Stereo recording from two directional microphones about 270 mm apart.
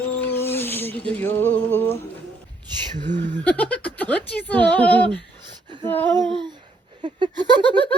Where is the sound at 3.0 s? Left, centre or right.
Right.